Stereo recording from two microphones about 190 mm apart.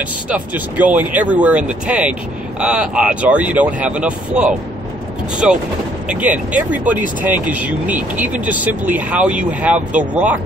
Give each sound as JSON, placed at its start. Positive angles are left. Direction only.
{"t": 0.3, "sound": "speech", "side_deg": -10}
{"t": 6.0, "sound": "speech", "side_deg": -5}